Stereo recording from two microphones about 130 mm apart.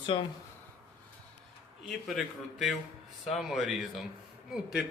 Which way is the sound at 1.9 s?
Centre (ahead or behind).